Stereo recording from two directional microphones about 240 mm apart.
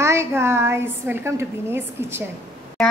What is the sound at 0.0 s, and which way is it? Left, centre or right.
A woman's voice, centre.